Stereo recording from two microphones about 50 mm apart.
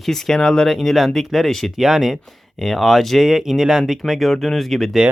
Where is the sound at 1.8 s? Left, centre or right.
Centre.